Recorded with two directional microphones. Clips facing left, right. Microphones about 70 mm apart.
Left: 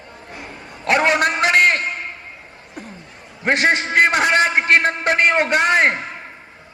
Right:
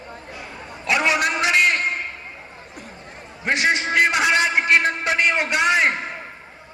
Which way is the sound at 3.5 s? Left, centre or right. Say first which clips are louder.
Left 3 dB; left.